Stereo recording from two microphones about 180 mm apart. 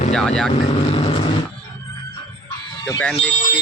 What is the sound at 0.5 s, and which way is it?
Speech, 35° left (ahead or behind).